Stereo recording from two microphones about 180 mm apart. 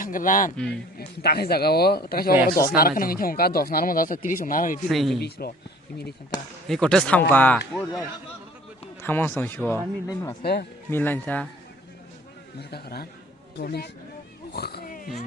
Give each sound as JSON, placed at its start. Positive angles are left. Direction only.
{"t": 0.0, "sound": "a man's voice", "side_deg": 50}
{"t": 0.5, "sound": "speech", "side_deg": 5}
{"t": 0.9, "sound": "speech", "side_deg": 60}
{"t": 4.9, "sound": "speech", "side_deg": 0}
{"t": 6.7, "sound": "speech", "side_deg": 5}
{"t": 9.0, "sound": "speech", "side_deg": 10}
{"t": 10.4, "sound": "speech", "side_deg": 65}
{"t": 10.9, "sound": "speech", "side_deg": 10}
{"t": 12.5, "sound": "speech", "side_deg": 60}
{"t": 14.5, "sound": "pig", "side_deg": 65}